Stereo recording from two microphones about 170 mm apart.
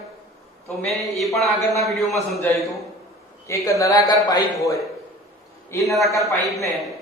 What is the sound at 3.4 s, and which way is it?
A man's voice, 20° left (ahead or behind).